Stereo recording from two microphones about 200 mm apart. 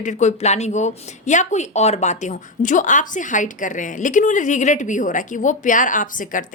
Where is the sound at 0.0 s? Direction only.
35° left (ahead or behind).